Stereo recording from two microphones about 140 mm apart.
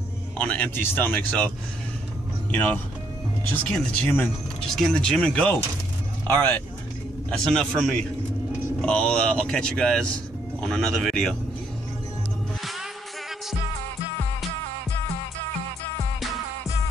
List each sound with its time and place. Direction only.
0.4 s speech: 5° left (ahead or behind)
2.5 s speech: 10° left (ahead or behind)
7.2 s speech: 5° left (ahead or behind)